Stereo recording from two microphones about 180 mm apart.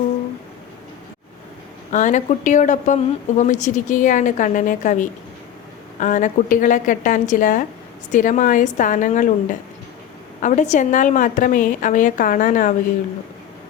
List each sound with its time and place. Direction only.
1.9 s a woman's voice: 40° left (ahead or behind)